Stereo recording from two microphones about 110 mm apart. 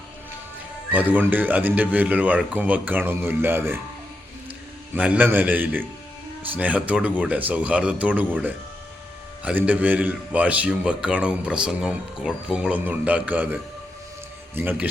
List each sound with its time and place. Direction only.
0.9 s a man's voice: 15° right (ahead or behind)
4.9 s a man's voice: 15° right (ahead or behind)